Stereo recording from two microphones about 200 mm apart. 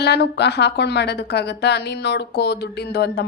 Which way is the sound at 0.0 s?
55° left (ahead or behind).